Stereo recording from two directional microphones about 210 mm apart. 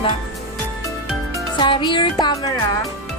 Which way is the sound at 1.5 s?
20° left (ahead or behind).